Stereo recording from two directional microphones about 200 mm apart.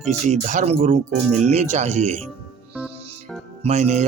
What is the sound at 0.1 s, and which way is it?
Speech, 35° right (ahead or behind).